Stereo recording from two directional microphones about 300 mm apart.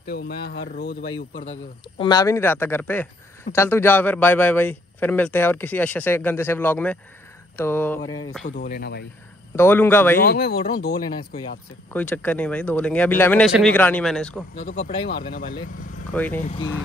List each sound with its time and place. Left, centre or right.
0.0 s speech: left
1.1 s a man's voice: centre
8.5 s speech: left
9.6 s speech: centre
10.2 s speech: left
11.9 s a man's voice: centre
14.5 s speech: left
16.1 s a man's voice: centre
16.4 s speech: centre